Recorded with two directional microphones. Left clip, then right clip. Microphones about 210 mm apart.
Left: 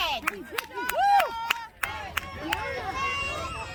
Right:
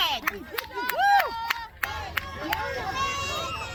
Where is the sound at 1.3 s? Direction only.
25° left (ahead or behind).